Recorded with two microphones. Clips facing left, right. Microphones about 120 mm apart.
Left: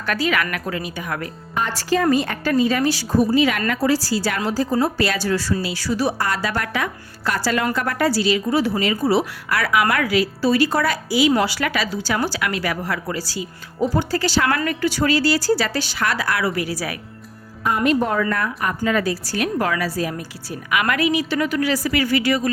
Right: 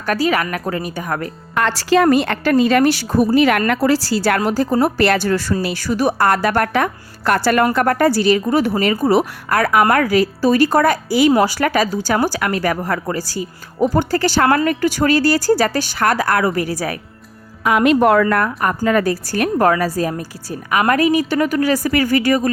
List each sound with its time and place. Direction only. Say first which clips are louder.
0.0 s speech: right 4 dB; 40° right (ahead or behind)
0.8 s a woman's voice: right 4 dB; 45° right (ahead or behind)
1.5 s a woman's voice: right 6 dB; 85° right; by 17.0 s 45° right (ahead or behind)
17.6 s a woman's voice: right 6 dB; 90° right; by 22.4 s 45° right (ahead or behind)